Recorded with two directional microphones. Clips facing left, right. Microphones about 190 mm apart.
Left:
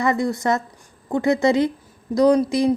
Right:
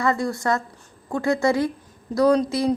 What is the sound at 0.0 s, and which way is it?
A woman's voice, 20° left (ahead or behind).